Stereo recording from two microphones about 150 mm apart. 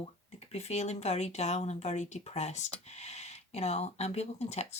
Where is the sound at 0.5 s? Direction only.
45° left (ahead or behind).